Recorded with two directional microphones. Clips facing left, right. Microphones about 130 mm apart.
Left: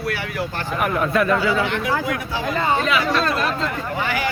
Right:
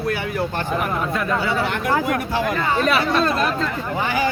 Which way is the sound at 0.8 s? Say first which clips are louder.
Left 4 dB; 75° left (ahead or behind).